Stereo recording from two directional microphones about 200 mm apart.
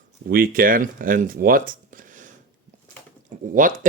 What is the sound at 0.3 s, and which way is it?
Speech, 45° right (ahead or behind).